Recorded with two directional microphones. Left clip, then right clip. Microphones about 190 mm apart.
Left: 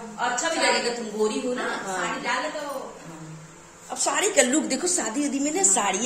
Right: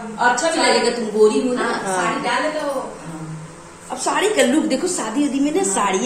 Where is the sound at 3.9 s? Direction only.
65° left (ahead or behind).